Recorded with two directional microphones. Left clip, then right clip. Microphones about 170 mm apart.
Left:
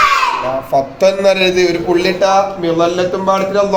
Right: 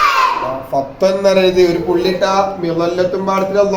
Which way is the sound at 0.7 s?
20° left (ahead or behind).